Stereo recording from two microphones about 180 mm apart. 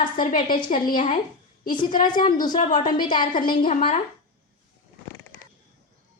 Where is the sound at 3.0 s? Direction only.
25° left (ahead or behind).